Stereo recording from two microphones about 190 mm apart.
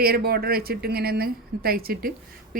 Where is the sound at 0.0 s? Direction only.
55° right (ahead or behind).